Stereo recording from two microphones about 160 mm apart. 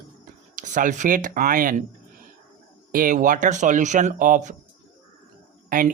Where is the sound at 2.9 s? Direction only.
60° right (ahead or behind).